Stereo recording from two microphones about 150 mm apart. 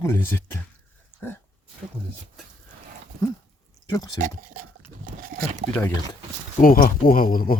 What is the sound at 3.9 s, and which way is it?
Speech, 25° left (ahead or behind).